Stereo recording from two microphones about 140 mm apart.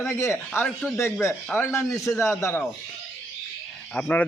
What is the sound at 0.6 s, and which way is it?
Speech, centre (ahead or behind).